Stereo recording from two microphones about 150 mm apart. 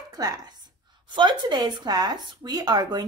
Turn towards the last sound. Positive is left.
turn(degrees=-25)  # may be behind; listen again after turning